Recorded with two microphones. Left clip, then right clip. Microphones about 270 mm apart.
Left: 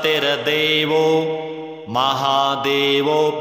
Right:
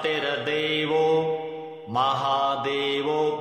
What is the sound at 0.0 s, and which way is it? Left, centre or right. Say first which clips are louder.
Mantra: left 8 dB; left.